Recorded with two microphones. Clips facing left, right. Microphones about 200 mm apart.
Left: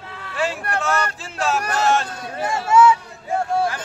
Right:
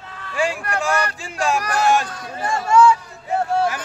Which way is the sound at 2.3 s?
5° left (ahead or behind).